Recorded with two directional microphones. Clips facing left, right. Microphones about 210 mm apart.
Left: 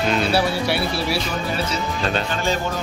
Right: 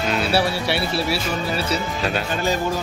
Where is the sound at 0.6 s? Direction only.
Centre (ahead or behind).